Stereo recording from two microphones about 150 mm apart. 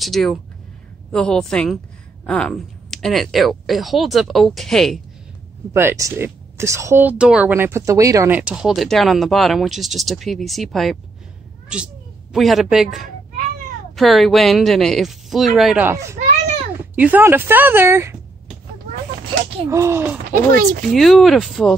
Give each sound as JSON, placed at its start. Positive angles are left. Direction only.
{"t": 0.0, "sound": "speech", "side_deg": 0}
{"t": 5.7, "sound": "speech", "side_deg": -15}
{"t": 8.4, "sound": "speech", "side_deg": -5}
{"t": 15.9, "sound": "speech", "side_deg": -20}
{"t": 19.7, "sound": "speech", "side_deg": -20}
{"t": 20.9, "sound": "speech", "side_deg": 0}